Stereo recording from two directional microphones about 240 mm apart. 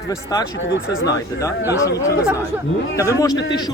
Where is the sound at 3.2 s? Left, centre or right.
Centre.